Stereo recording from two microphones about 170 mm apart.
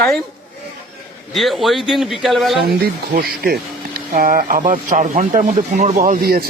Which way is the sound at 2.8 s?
65° right (ahead or behind).